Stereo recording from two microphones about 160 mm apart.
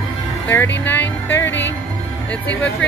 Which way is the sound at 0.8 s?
10° left (ahead or behind).